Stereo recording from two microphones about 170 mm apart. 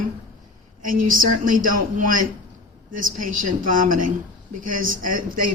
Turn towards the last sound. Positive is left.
turn(degrees=-55)  # may be behind; listen again after turning